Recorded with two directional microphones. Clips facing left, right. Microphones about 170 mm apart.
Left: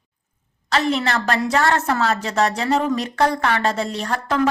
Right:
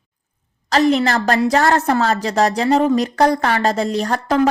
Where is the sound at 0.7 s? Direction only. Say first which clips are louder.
Right 5 dB; 40° right (ahead or behind).